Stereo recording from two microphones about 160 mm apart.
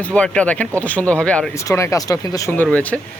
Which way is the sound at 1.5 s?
20° left (ahead or behind).